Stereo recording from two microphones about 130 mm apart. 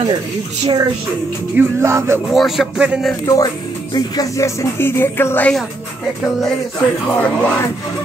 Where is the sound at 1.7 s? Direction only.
20° right (ahead or behind).